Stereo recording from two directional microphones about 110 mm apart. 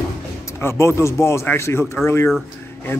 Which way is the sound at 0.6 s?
25° left (ahead or behind).